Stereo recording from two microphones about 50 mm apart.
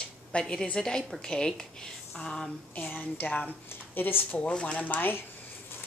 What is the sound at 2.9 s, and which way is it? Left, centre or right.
Speech, left.